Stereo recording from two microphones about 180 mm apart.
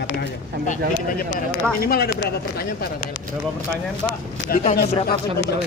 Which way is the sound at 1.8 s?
55° left (ahead or behind).